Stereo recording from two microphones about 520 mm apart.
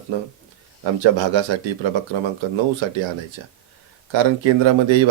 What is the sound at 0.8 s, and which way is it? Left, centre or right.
Speech, right.